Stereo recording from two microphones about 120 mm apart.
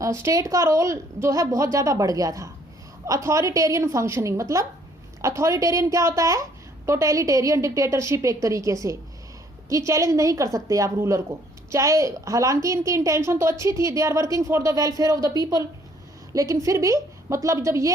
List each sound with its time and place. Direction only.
0.0 s speech: 25° right (ahead or behind)